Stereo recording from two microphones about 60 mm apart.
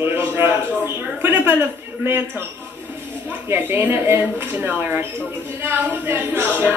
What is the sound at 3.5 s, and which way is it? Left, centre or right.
A man's voice, right.